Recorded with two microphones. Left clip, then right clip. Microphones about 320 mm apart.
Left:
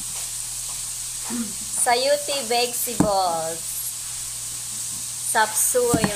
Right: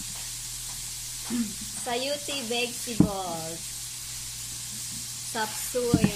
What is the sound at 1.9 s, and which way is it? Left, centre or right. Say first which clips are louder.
A woman's voice: left 10 dB; left.